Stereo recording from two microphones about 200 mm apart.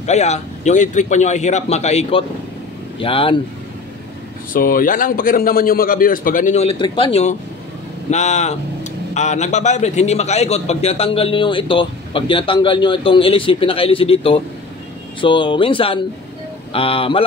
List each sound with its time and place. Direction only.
0.0 s a man's voice: 35° left (ahead or behind)
4.5 s a man's voice: 45° left (ahead or behind); by 17.2 s 25° left (ahead or behind)